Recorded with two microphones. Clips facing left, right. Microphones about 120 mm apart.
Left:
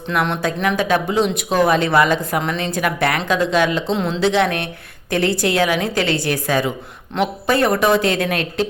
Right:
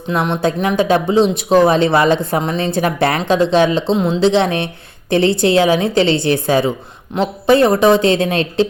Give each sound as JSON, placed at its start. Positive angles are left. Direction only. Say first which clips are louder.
{"t": 0.1, "sound": "speech", "louder": "right 3 dB", "side_deg": -25}